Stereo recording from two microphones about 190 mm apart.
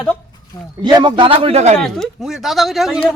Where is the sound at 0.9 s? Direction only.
25° right (ahead or behind).